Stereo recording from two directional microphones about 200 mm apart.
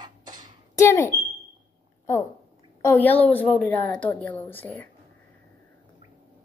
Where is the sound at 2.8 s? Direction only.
10° left (ahead or behind).